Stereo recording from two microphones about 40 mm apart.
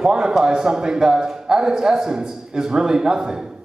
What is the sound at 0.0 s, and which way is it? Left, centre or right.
A man's voice, centre.